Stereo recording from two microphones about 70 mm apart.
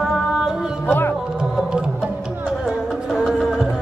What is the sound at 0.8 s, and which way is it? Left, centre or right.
Music, left.